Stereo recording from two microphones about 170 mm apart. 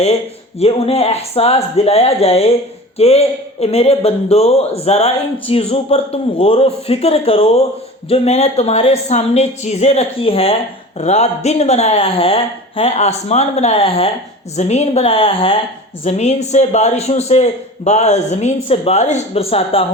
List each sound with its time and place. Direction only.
0.6 s a woman's voice: 35° left (ahead or behind)